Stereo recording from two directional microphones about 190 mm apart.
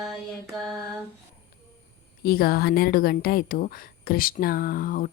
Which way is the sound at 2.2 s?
50° left (ahead or behind).